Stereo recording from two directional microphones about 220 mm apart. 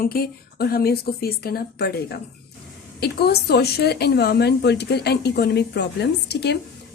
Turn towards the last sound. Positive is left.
turn(degrees=50)  # may be behind; listen again after turning